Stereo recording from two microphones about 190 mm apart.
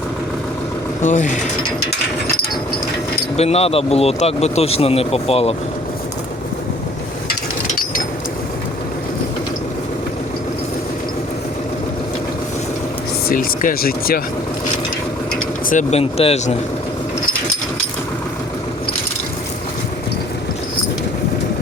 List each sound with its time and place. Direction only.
1.0 s speech: 40° left (ahead or behind)
3.3 s speech: 35° left (ahead or behind)
13.2 s speech: 50° left (ahead or behind)
15.7 s speech: 35° left (ahead or behind)